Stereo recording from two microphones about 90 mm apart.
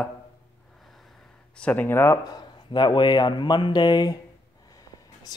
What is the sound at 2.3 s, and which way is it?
Speech, 60° left (ahead or behind).